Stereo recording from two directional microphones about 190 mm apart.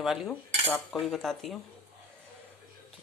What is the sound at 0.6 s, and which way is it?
Cutlery, 10° left (ahead or behind).